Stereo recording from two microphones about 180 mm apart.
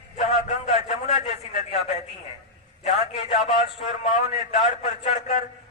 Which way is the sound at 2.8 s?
35° left (ahead or behind).